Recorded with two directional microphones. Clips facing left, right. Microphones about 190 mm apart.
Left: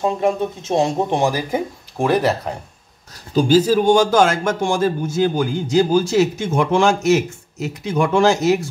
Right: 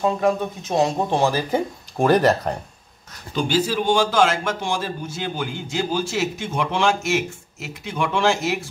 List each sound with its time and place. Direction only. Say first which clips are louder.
0.0 s speech: left 2 dB; 25° left (ahead or behind)
2.0 s speech: right 1 dB; 5° left (ahead or behind)
3.3 s a man's voice: left 7 dB; 40° left (ahead or behind)